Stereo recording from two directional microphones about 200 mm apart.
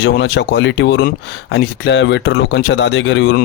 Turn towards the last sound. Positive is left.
turn(degrees=60)  # may be behind; listen again after turning